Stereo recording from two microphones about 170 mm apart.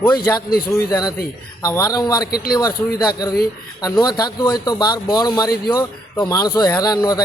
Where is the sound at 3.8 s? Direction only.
20° left (ahead or behind).